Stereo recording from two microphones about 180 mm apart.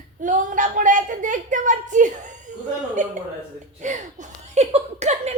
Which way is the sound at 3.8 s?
40° right (ahead or behind).